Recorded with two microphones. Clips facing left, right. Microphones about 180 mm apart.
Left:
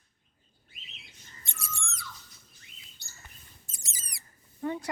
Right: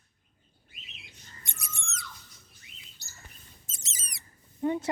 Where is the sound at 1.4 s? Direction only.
20° right (ahead or behind).